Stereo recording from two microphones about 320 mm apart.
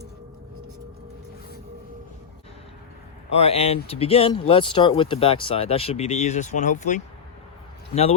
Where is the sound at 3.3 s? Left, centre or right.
Centre.